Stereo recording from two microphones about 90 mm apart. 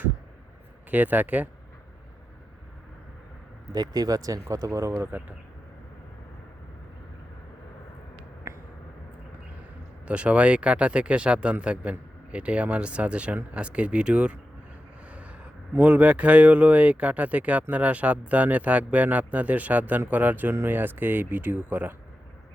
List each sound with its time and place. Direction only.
0.9 s speech: 20° right (ahead or behind)
3.7 s speech: 45° right (ahead or behind)
8.5 s a sound: 30° right (ahead or behind)
10.1 s speech: 15° right (ahead or behind)